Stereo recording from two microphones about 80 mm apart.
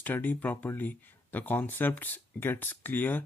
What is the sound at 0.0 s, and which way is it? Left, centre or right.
Speech, left.